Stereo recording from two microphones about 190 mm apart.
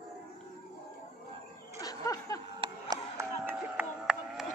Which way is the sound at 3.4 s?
10° right (ahead or behind).